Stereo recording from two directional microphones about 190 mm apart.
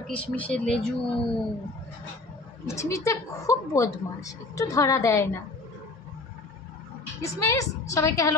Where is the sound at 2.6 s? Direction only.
15° left (ahead or behind).